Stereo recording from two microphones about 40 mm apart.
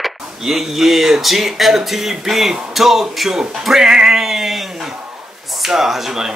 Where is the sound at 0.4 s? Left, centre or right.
Centre.